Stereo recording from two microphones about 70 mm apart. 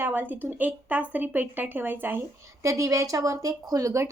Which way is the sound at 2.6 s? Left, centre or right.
Right.